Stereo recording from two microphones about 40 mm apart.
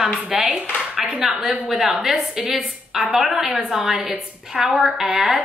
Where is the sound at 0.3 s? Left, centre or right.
Centre.